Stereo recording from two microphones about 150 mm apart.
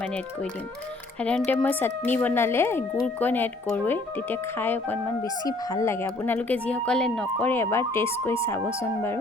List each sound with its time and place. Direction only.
1.2 s speech: 10° left (ahead or behind)
5.2 s speech: 25° left (ahead or behind)